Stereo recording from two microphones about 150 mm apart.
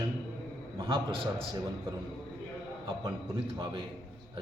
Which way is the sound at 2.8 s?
30° right (ahead or behind).